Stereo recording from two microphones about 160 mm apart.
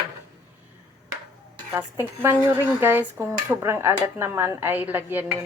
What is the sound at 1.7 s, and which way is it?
Speech, 15° right (ahead or behind).